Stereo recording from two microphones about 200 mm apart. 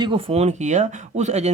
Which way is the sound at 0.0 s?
25° right (ahead or behind).